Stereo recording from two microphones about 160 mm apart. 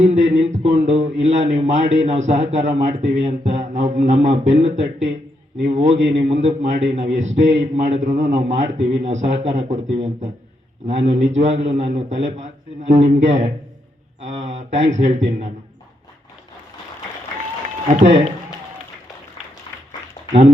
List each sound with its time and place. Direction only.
0.0 s speech: 45° right (ahead or behind)
18.0 s speech: 40° right (ahead or behind)